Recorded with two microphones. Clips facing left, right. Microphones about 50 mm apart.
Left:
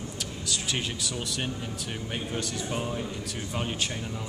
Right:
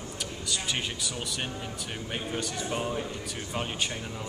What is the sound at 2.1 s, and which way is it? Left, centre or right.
Speech, centre.